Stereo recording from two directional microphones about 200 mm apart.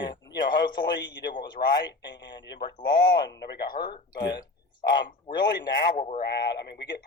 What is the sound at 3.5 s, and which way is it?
Speech, 45° left (ahead or behind).